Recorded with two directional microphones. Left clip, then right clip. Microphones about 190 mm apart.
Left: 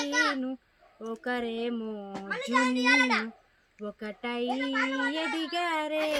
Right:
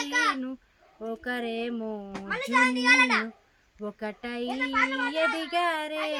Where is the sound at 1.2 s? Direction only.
15° right (ahead or behind).